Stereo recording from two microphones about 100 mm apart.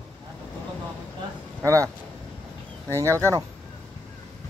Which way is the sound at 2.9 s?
30° right (ahead or behind).